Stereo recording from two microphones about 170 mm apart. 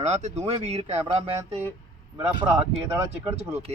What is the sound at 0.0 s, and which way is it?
A man's voice, 45° right (ahead or behind).